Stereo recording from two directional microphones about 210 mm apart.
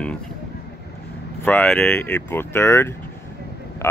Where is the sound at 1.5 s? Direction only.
10° left (ahead or behind).